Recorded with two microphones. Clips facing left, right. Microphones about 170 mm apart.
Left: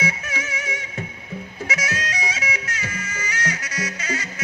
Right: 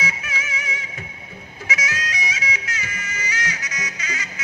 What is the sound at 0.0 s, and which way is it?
Music, 50° left (ahead or behind).